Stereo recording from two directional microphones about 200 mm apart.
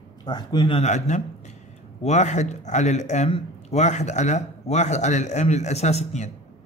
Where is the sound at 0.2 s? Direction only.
20° left (ahead or behind).